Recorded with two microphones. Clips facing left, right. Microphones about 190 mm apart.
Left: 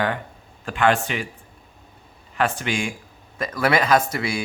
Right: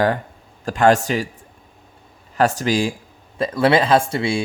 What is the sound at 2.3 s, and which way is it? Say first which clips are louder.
Speech: right 6 dB; 40° right (ahead or behind).